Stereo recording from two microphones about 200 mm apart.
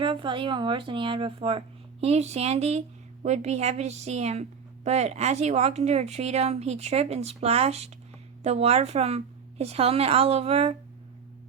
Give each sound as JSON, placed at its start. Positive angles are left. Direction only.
{"t": 0.0, "sound": "a woman's voice", "side_deg": -25}